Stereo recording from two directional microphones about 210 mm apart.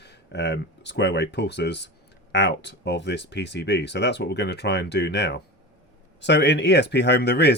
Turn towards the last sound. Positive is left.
turn(degrees=50)  # may be behind; listen again after turning